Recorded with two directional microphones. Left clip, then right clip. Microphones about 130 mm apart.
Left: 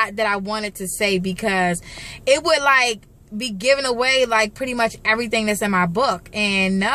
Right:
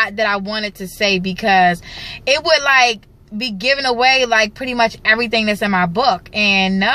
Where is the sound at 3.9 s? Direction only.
40° left (ahead or behind).